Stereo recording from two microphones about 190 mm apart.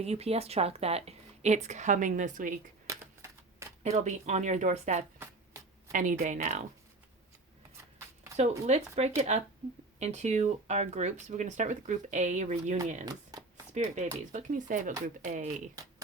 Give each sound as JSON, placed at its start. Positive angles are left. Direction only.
{"t": 0.0, "sound": "speech", "side_deg": -35}
{"t": 2.8, "sound": "typewriter", "side_deg": -15}
{"t": 3.8, "sound": "speech", "side_deg": -35}
{"t": 8.4, "sound": "speech", "side_deg": -35}